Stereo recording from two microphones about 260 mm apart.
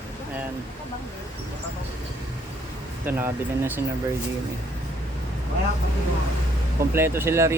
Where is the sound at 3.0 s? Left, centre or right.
Centre.